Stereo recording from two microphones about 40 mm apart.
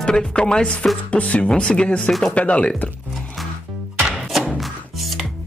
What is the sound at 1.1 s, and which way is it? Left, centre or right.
Speech, left.